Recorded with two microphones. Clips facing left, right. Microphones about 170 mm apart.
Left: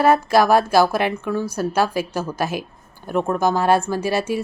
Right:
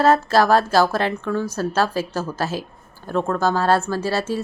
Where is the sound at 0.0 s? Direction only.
15° left (ahead or behind).